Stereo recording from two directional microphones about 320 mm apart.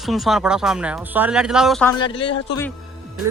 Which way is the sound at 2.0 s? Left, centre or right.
Centre.